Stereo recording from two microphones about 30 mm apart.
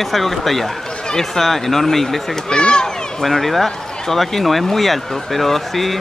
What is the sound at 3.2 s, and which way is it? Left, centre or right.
Speech, centre.